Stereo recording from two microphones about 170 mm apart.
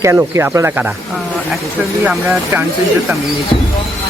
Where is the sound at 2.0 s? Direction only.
10° right (ahead or behind).